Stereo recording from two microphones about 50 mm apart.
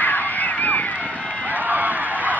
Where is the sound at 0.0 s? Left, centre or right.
Left.